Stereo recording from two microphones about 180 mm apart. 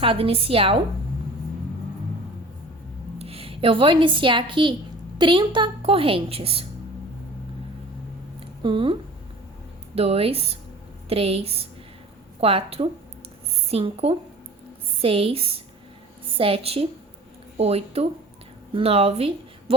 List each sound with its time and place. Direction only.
0.0 s a woman's voice: 30° right (ahead or behind)
3.2 s a woman's voice: 35° right (ahead or behind)
8.6 s a woman's voice: 30° right (ahead or behind)